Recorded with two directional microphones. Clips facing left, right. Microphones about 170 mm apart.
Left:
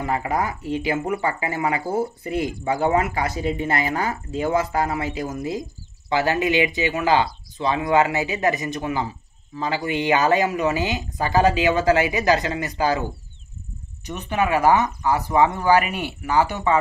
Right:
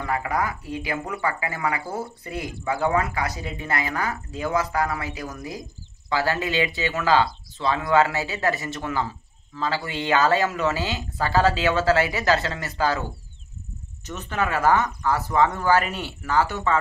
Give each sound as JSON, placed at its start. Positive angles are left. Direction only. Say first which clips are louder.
{"t": 0.0, "sound": "speech", "louder": "left 2 dB", "side_deg": 25}
{"t": 14.0, "sound": "speech", "louder": "left 4 dB", "side_deg": 15}